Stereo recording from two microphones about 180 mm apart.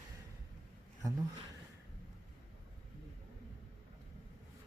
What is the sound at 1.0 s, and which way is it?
Speech, 20° right (ahead or behind).